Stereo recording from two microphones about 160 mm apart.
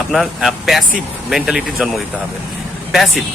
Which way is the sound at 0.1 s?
Centre (ahead or behind).